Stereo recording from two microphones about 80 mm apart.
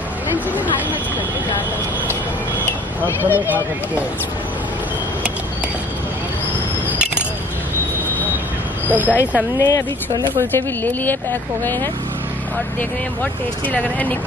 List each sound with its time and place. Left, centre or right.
3.3 s speech: right
6.9 s a sound: centre
8.8 s speech: right
9.6 s speech: left
10.5 s speech: left
13.2 s speech: centre